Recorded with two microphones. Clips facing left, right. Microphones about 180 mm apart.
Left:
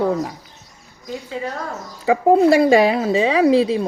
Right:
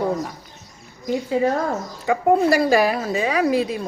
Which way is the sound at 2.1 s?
25° left (ahead or behind).